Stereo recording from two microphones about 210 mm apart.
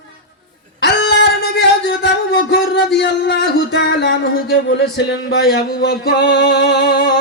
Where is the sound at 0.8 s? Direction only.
55° left (ahead or behind).